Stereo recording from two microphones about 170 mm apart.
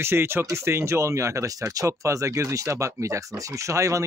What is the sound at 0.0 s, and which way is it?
Speech, 15° right (ahead or behind).